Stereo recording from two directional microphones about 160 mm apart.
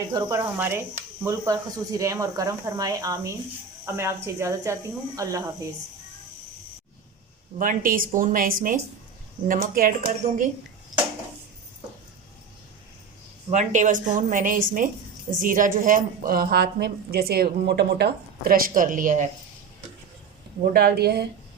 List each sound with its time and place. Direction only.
0.1 s speech: 20° right (ahead or behind)
7.6 s a woman's voice: 60° right (ahead or behind)
13.5 s a woman's voice: 50° right (ahead or behind)
20.7 s speech: 80° right